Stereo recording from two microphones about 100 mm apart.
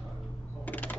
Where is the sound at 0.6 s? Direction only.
15° left (ahead or behind).